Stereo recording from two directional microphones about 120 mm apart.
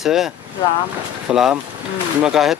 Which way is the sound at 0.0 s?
5° right (ahead or behind).